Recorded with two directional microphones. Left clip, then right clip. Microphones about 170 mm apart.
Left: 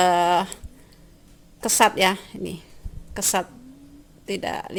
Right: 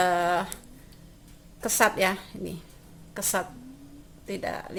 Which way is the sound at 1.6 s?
40° left (ahead or behind).